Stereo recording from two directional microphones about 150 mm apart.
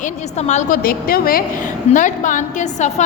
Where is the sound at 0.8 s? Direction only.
80° left.